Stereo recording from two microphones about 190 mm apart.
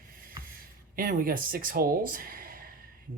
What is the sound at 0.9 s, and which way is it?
Speech, 50° right (ahead or behind).